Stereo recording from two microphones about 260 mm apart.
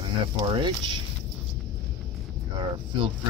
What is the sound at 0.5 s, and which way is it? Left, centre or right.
Speech, centre.